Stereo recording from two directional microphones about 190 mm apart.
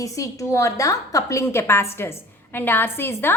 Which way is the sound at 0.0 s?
15° left (ahead or behind).